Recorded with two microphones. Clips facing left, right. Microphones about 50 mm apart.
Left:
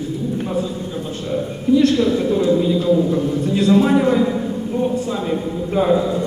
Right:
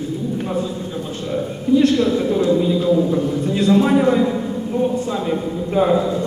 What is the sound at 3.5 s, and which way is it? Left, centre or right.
Speech, right.